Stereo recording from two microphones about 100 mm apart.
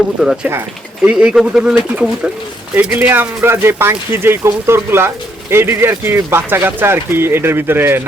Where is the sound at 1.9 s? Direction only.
15° right (ahead or behind).